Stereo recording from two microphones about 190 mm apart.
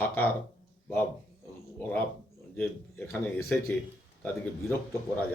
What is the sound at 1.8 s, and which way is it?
Speech, 5° left (ahead or behind).